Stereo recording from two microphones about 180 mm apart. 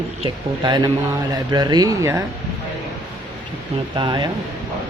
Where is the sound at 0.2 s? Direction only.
25° right (ahead or behind).